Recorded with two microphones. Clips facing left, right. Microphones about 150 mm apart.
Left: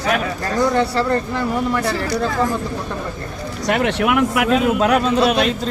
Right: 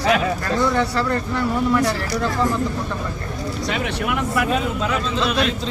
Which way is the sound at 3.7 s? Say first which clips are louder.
Left 8 dB; 60° left (ahead or behind).